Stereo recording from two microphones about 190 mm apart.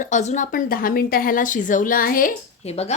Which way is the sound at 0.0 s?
40° left (ahead or behind).